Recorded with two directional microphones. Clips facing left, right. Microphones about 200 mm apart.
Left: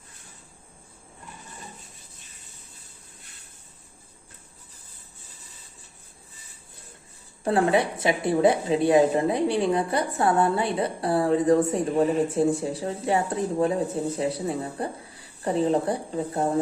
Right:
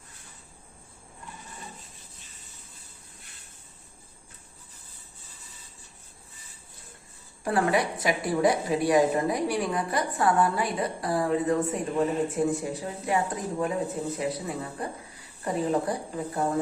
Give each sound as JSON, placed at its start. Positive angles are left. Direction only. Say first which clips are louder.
{"t": 7.4, "sound": "a woman's voice", "louder": "left 3 dB", "side_deg": 25}